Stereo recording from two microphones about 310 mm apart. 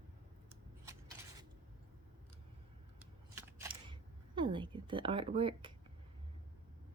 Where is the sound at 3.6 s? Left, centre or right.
Centre.